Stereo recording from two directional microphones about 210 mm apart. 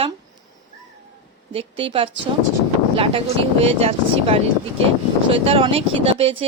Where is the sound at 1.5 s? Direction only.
25° right (ahead or behind).